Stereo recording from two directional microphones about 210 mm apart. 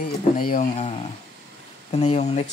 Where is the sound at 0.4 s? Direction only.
40° left (ahead or behind).